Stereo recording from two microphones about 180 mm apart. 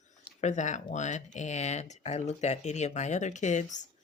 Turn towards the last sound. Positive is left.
turn(degrees=40)  # may be behind; listen again after turning